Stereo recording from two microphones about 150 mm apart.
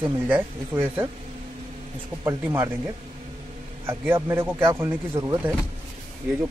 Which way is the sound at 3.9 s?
15° right (ahead or behind).